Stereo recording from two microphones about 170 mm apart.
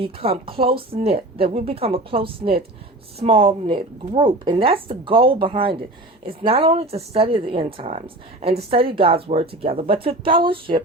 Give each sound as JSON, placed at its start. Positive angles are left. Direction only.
{"t": 0.0, "sound": "a woman's voice", "side_deg": -35}